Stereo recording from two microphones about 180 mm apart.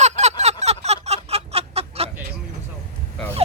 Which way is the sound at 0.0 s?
40° right (ahead or behind).